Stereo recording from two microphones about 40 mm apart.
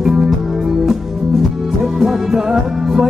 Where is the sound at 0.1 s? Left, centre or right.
Centre.